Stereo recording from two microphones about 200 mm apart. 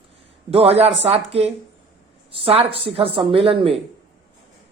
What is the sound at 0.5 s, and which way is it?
Speech, 30° right (ahead or behind).